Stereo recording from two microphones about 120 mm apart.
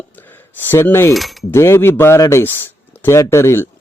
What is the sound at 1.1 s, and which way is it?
Coin, centre (ahead or behind).